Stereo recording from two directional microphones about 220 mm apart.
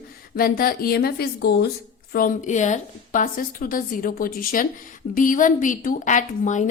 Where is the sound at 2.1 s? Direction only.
35° left (ahead or behind).